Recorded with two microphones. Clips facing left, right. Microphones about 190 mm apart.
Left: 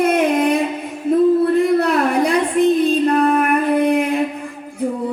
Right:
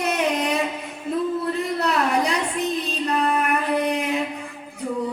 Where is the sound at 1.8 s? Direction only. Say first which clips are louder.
Left 5 dB; 55° left (ahead or behind).